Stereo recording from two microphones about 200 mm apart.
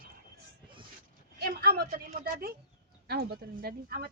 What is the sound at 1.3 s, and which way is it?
Speech, 50° right (ahead or behind).